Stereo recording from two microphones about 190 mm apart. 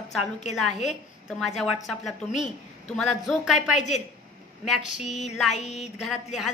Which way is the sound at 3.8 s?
35° left (ahead or behind).